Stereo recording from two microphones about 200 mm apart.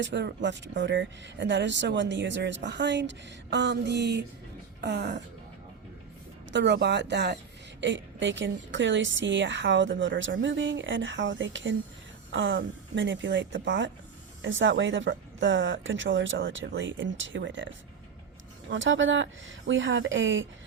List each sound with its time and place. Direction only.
0.0 s speech: 60° right (ahead or behind)
6.5 s a woman's voice: 60° right (ahead or behind)